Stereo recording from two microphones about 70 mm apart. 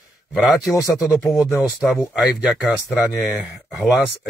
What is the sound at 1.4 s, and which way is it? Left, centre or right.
Speech, centre.